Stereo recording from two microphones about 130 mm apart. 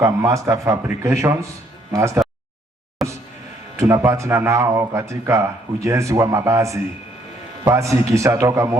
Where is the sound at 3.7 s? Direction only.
20° right (ahead or behind).